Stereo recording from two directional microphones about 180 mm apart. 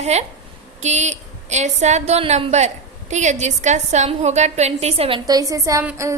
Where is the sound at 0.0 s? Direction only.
40° right (ahead or behind).